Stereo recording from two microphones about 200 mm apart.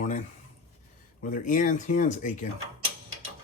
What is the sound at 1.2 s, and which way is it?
Speech, 40° left (ahead or behind).